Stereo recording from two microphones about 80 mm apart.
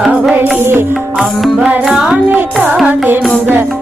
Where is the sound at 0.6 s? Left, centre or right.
Right.